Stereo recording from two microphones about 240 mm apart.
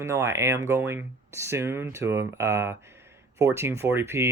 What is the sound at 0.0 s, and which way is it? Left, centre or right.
Speech, centre.